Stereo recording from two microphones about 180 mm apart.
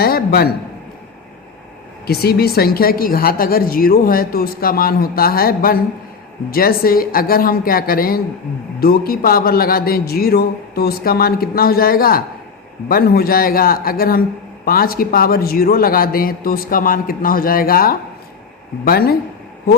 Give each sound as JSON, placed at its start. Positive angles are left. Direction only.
{"t": 0.0, "sound": "a man's voice", "side_deg": 60}
{"t": 2.0, "sound": "a woman's voice", "side_deg": 60}